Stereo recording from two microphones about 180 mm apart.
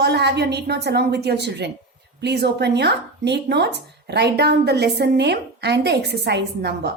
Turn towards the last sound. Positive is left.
turn(degrees=-65)  # may be behind; listen again after turning